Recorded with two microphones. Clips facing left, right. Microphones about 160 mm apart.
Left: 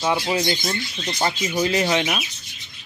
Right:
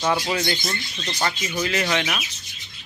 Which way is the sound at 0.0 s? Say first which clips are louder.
Left 1 dB; 10° left (ahead or behind).